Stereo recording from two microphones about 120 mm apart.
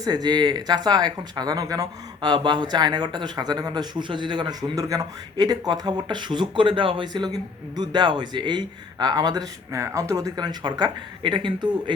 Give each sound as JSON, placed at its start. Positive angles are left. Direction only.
{"t": 0.0, "sound": "speech", "side_deg": -35}